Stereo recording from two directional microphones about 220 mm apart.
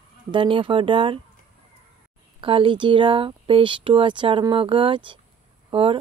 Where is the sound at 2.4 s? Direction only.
25° right (ahead or behind).